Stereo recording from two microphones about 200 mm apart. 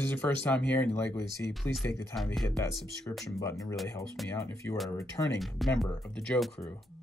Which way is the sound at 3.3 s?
15° left (ahead or behind).